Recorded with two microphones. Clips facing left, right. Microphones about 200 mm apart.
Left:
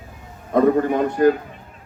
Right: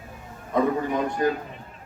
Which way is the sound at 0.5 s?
60° left (ahead or behind).